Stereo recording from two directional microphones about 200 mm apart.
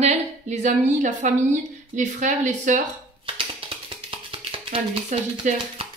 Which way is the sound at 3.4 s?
25° right (ahead or behind).